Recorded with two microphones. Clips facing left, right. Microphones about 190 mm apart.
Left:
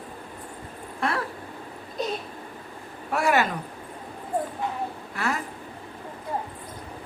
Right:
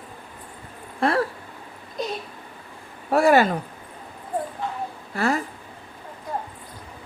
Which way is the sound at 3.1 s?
35° right (ahead or behind).